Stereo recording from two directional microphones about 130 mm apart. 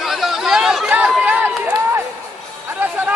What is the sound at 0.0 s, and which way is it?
Chatter, centre (ahead or behind).